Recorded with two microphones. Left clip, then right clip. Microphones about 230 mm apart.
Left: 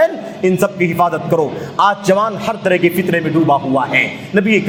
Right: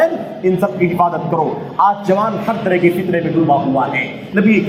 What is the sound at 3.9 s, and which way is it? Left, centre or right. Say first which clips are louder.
Speech: left 4 dB; left.